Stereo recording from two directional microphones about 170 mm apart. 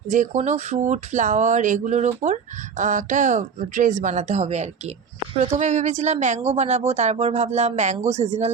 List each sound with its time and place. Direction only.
0.1 s speech: 45° right (ahead or behind)